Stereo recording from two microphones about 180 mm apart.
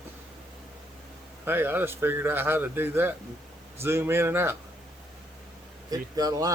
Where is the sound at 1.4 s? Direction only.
10° right (ahead or behind).